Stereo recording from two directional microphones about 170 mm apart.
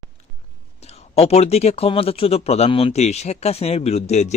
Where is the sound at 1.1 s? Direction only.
40° left (ahead or behind).